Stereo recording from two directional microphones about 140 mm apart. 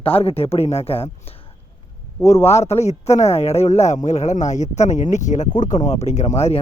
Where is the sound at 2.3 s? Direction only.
50° left (ahead or behind).